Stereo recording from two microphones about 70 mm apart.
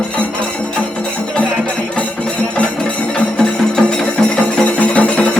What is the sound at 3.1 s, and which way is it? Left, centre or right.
Music, centre.